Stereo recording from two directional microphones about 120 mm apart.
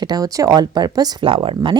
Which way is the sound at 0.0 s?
35° right (ahead or behind).